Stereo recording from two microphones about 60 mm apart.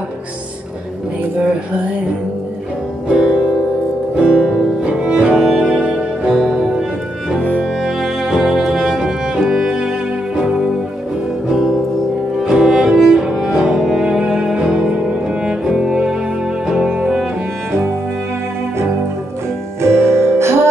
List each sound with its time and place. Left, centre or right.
3.1 s music: centre
12.4 s cello: centre
16.6 s music: centre
19.8 s music: right